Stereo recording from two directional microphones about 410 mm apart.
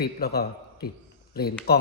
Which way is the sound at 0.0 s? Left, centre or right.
Left.